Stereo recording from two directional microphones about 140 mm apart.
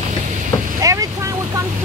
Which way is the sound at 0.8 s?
25° right (ahead or behind).